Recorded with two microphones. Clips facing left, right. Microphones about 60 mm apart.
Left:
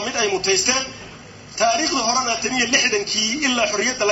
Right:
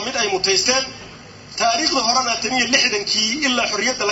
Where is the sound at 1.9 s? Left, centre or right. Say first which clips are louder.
Right 1 dB; right.